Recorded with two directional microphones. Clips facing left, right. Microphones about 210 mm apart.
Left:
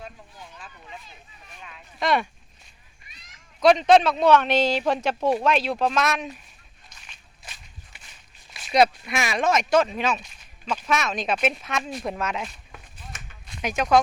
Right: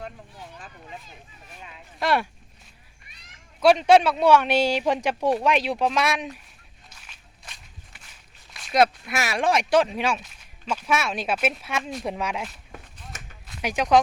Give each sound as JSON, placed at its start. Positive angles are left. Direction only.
{"t": 2.0, "sound": "speech", "side_deg": -5}
{"t": 3.6, "sound": "speech", "side_deg": -10}
{"t": 6.9, "sound": "walk", "side_deg": -5}
{"t": 12.0, "sound": "speech", "side_deg": -10}